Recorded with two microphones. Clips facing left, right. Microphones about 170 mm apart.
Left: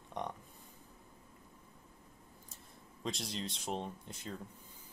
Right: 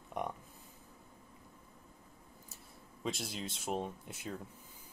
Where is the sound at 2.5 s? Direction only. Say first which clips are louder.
Right 1 dB; 5° right (ahead or behind).